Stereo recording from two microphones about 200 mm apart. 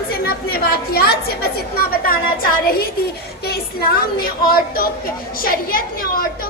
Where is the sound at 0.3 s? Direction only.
50° left (ahead or behind).